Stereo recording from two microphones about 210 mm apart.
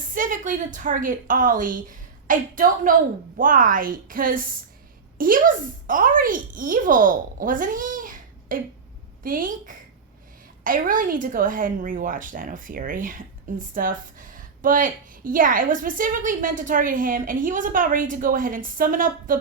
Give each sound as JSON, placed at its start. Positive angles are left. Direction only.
{"t": 0.1, "sound": "a woman's voice", "side_deg": -40}